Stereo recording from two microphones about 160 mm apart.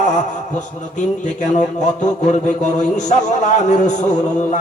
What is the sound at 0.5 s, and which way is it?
A man's voice, 50° left (ahead or behind).